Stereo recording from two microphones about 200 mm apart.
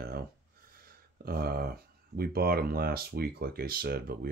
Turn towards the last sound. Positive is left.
turn(degrees=-50)  # may be behind; listen again after turning